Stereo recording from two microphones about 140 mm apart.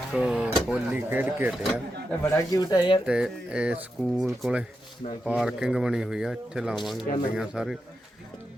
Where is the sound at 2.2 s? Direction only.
20° left (ahead or behind).